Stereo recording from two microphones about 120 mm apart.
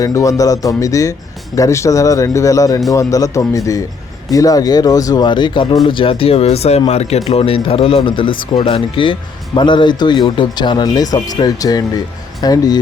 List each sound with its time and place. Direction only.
0.0 s speech: 30° left (ahead or behind)